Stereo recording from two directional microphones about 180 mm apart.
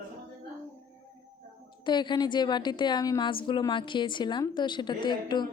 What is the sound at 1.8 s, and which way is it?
A woman's voice, 25° left (ahead or behind).